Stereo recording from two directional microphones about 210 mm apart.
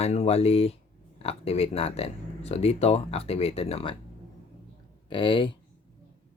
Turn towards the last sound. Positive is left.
turn(degrees=25)  # may be behind; listen again after turning